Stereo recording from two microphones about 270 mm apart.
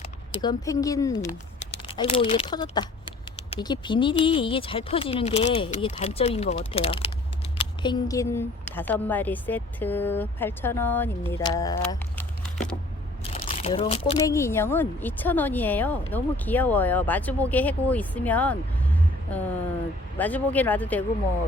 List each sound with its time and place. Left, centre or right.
0.3 s speech: centre
13.3 s speech: left; by 21.0 s centre